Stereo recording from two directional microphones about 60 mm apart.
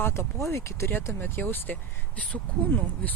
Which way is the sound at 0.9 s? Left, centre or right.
Left.